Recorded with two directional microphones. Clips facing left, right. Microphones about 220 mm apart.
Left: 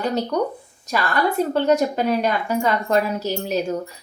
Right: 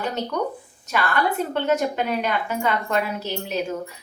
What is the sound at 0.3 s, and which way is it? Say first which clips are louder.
A woman's voice: left 4 dB; 35° left (ahead or behind).